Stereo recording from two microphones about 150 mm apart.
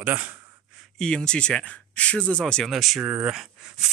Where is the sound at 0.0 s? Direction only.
15° right (ahead or behind).